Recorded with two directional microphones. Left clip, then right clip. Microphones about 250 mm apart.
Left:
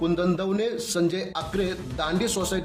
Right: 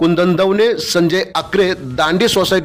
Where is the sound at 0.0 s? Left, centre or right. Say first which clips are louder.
Right 12 dB; right.